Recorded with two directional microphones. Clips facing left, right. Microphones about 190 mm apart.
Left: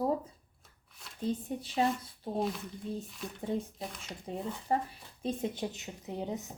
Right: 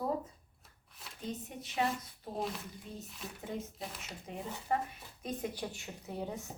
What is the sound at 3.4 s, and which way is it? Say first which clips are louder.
Speech: left 6 dB; 30° left (ahead or behind).